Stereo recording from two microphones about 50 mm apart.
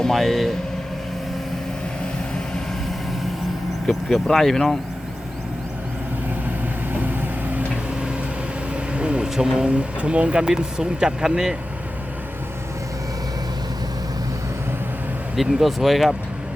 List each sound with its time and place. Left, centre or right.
0.0 s speech: centre
3.8 s speech: centre
8.7 s vehicle: right
9.3 s speech: centre
15.4 s speech: centre